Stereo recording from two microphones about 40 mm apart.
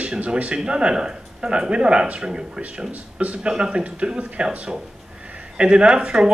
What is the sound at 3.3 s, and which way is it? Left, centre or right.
Speech, right.